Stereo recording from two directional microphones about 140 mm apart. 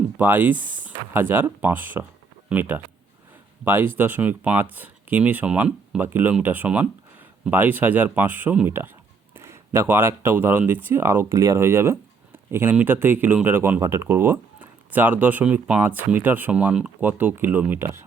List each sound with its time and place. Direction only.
0.2 s speech: 15° right (ahead or behind)